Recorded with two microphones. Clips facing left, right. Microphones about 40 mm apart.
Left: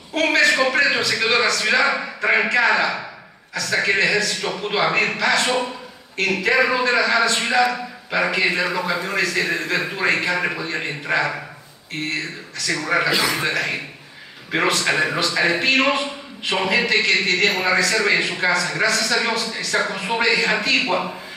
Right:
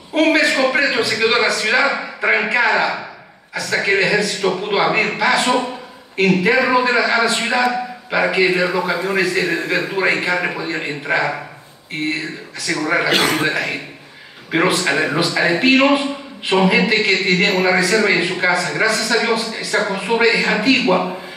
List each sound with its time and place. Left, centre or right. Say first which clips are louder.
0.1 s a man's voice: right 2 dB; centre
13.1 s a man's voice: right 4 dB; right
13.5 s a man's voice: right 2 dB; centre